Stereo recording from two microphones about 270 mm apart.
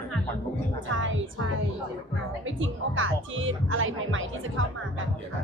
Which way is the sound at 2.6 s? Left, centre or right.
Right.